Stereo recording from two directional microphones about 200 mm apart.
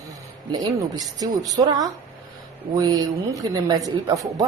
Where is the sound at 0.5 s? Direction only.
20° right (ahead or behind).